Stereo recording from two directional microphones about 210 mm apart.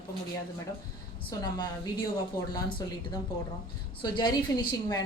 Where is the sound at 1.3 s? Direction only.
20° left (ahead or behind).